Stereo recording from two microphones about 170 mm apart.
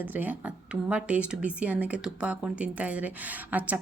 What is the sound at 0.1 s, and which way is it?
Speech, 10° right (ahead or behind).